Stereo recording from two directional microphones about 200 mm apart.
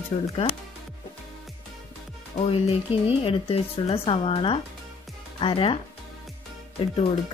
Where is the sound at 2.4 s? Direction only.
30° left (ahead or behind).